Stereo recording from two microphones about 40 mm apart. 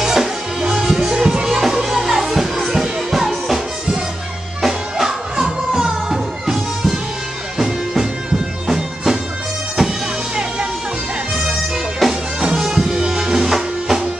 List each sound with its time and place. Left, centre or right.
0.0 s music: centre
12.0 s music: centre